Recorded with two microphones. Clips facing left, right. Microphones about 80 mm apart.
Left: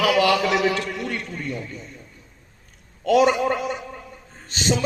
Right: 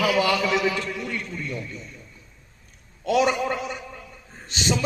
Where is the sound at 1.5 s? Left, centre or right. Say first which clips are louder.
Left 1 dB; left.